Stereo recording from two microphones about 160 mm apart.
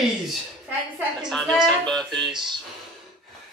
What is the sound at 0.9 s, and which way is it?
A man's voice, centre (ahead or behind).